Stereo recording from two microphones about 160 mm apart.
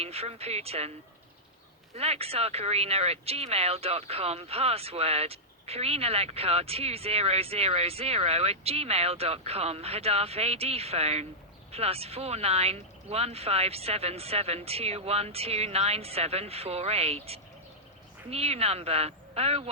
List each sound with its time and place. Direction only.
0.0 s speech: 40° right (ahead or behind)
2.0 s speech: 40° right (ahead or behind)